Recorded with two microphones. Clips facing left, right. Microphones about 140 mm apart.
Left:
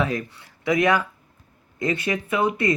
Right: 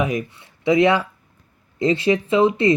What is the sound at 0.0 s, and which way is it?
Speech, 15° right (ahead or behind).